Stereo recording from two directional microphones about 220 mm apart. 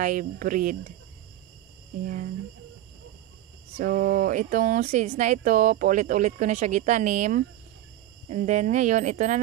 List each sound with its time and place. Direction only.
0.0 s speech: 35° right (ahead or behind)
3.7 s speech: 40° right (ahead or behind)